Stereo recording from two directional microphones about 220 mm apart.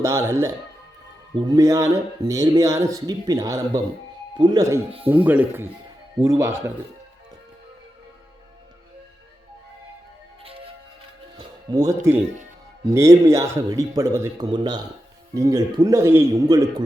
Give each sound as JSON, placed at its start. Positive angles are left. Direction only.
{"t": 0.0, "sound": "speech", "side_deg": -15}
{"t": 11.3, "sound": "speech", "side_deg": -15}